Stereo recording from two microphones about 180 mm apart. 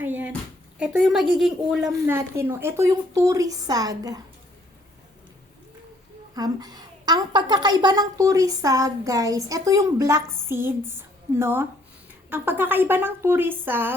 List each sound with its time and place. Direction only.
0.0 s a sound: 10° right (ahead or behind)
0.8 s a woman's voice: 5° right (ahead or behind)
2.1 s a woman's voice: 15° right (ahead or behind)
6.3 s a woman's voice: 20° right (ahead or behind)